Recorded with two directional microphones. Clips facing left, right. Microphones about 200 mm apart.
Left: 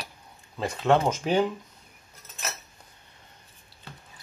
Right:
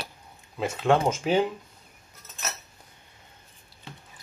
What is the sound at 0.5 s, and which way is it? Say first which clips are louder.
Speech: even; 10° right (ahead or behind).